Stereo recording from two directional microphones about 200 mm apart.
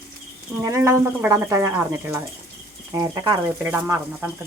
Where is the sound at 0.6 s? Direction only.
15° right (ahead or behind).